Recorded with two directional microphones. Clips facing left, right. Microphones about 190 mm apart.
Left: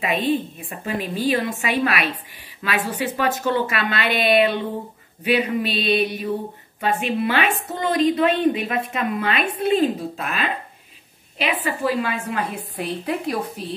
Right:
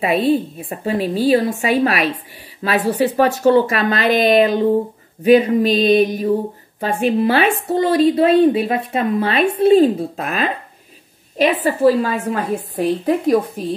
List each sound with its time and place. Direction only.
0.0 s a woman's voice: 40° right (ahead or behind)
11.6 s a woman's voice: 40° right (ahead or behind)